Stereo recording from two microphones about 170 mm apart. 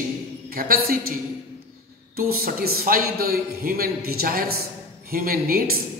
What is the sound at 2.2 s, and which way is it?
Speech, 60° right (ahead or behind).